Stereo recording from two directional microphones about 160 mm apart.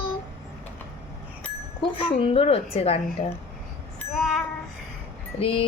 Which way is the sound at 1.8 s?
30° left (ahead or behind).